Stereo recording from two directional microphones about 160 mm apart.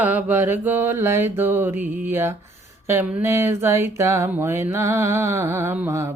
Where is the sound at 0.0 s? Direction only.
10° right (ahead or behind).